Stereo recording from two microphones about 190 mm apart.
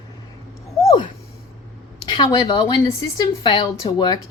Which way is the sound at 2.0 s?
20° left (ahead or behind).